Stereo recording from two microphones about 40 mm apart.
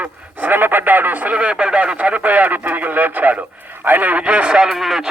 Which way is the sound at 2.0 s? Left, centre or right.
Right.